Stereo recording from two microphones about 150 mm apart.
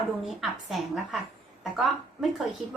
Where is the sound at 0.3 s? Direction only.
Centre (ahead or behind).